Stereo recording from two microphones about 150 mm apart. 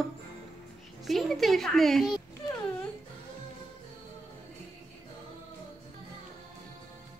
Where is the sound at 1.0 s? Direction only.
Centre (ahead or behind).